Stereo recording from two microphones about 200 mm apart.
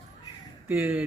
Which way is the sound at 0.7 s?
10° right (ahead or behind).